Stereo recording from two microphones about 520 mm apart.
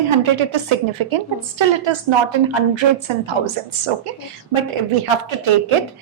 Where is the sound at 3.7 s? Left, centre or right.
Right.